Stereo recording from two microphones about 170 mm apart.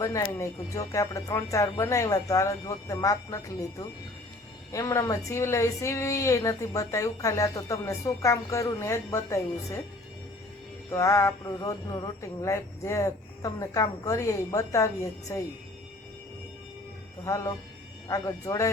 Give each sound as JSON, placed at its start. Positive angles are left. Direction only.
{"t": 0.0, "sound": "a woman's voice", "side_deg": 15}
{"t": 10.9, "sound": "a woman's voice", "side_deg": 15}
{"t": 17.2, "sound": "speech", "side_deg": 20}